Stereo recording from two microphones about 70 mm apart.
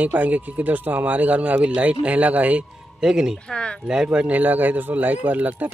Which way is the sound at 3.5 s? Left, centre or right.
Centre.